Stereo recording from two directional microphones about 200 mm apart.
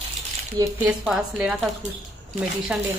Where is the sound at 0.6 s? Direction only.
20° right (ahead or behind).